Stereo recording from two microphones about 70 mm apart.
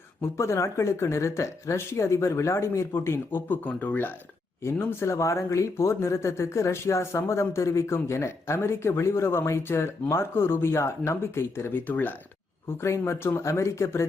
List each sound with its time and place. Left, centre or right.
0.2 s speech: left
12.8 s speech: left